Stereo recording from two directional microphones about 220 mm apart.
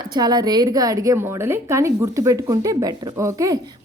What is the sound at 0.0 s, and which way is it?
A woman's voice, 20° right (ahead or behind).